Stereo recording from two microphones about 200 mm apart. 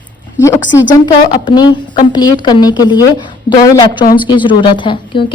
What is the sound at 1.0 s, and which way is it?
A woman's voice, 20° left (ahead or behind).